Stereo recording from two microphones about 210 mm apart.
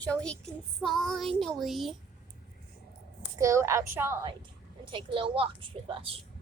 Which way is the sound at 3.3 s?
15° right (ahead or behind).